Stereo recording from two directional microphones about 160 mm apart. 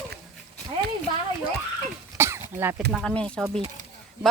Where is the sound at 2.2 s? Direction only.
15° right (ahead or behind).